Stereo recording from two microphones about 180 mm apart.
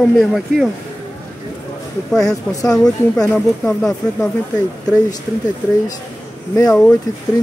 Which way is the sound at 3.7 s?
5° left (ahead or behind).